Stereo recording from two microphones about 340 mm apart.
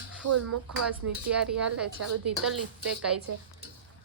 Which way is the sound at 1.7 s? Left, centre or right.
Right.